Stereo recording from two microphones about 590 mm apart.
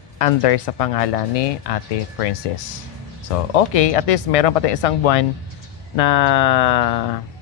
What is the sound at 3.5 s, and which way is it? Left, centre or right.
Speech, left.